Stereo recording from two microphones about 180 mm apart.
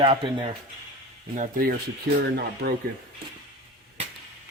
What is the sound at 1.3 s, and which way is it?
Speech, 50° right (ahead or behind).